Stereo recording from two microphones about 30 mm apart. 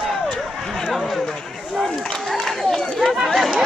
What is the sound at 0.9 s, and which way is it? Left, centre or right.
Run, centre.